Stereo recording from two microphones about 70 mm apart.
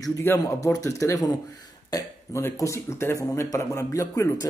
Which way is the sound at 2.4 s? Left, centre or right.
Left.